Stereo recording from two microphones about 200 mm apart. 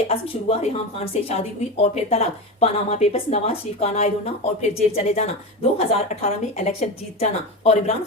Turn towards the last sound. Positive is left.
turn(degrees=35)  # may be behind; listen again after turning